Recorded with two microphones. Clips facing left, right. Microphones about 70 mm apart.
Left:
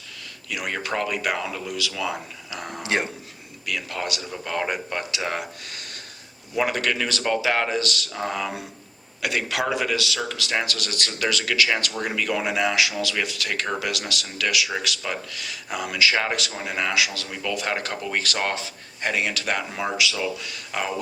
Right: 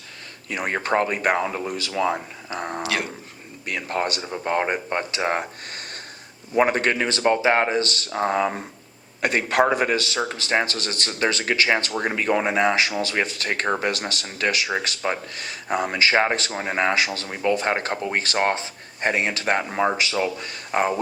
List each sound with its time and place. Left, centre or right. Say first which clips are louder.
0.4 s speech: right 4 dB; right
2.8 s speech: left 3 dB; left
3.7 s speech: right 4 dB; right